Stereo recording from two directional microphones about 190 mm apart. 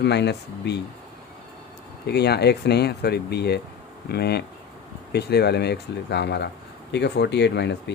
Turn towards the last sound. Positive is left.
turn(degrees=65)  # may be behind; listen again after turning